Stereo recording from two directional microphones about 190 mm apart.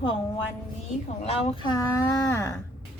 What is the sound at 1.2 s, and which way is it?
Speech, 30° left (ahead or behind).